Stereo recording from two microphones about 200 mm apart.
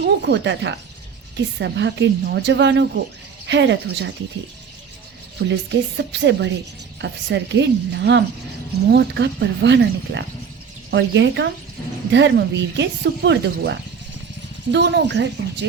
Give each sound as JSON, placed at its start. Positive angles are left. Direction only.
{"t": 0.0, "sound": "speech", "side_deg": -60}
{"t": 5.4, "sound": "speech", "side_deg": -55}